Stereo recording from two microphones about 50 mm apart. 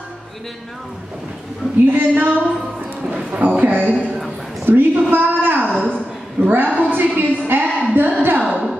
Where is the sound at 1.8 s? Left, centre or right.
Right.